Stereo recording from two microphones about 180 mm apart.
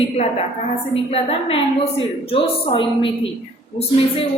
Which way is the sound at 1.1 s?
30° left (ahead or behind).